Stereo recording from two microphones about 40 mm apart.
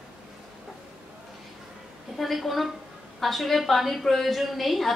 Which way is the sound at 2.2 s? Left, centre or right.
Centre.